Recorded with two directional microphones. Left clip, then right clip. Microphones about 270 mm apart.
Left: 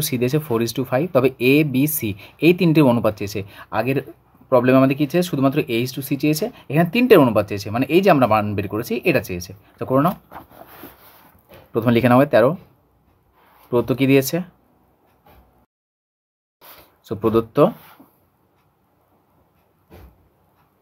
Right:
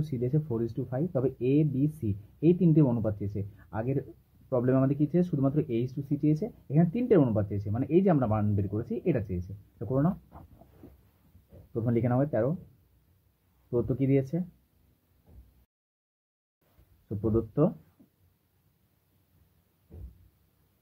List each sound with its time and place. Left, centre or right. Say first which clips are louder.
0.3 s speech: left 11 dB; left
11.7 s speech: left 14 dB; left
13.7 s speech: left 11 dB; left
17.2 s speech: left 12 dB; left